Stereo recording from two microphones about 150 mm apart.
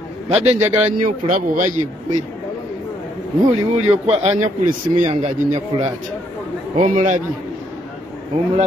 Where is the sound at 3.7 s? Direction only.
45° right (ahead or behind).